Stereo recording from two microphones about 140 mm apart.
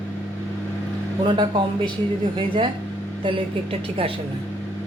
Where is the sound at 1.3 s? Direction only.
35° right (ahead or behind).